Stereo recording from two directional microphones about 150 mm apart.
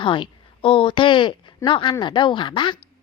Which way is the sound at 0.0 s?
35° left (ahead or behind).